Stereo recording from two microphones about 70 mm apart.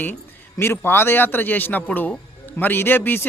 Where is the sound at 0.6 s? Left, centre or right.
Left.